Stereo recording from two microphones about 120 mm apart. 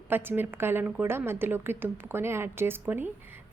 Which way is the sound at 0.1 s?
15° right (ahead or behind).